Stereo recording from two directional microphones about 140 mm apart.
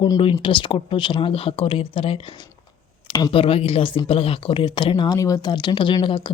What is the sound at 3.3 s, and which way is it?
Speech, 40° left (ahead or behind).